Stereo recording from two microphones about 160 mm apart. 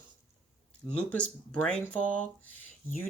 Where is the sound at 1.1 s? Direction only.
5° left (ahead or behind).